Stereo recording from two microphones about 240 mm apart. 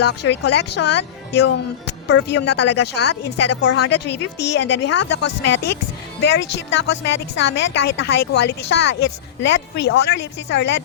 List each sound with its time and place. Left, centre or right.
0.0 s speech: left